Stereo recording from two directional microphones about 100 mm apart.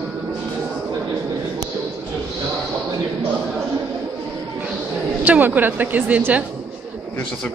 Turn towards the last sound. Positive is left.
turn(degrees=-15)  # may be behind; listen again after turning